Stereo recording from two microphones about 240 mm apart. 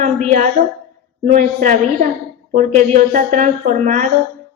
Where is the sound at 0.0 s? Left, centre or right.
Right.